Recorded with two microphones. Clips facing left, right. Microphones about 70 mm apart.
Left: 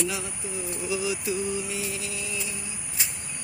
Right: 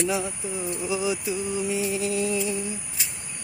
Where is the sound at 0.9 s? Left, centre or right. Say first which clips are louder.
Right 1 dB; right.